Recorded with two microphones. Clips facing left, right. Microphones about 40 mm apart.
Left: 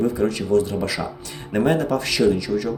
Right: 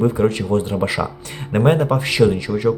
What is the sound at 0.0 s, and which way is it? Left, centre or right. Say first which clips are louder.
Speech: right 4 dB; right.